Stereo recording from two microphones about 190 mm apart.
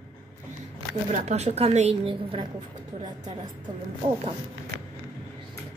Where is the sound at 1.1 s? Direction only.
35° right (ahead or behind).